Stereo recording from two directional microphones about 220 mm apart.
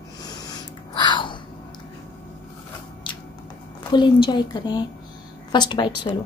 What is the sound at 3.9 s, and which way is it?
A woman's voice, 20° left (ahead or behind).